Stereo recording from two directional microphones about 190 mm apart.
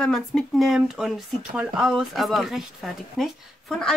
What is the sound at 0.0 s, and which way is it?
Speech, centre (ahead or behind).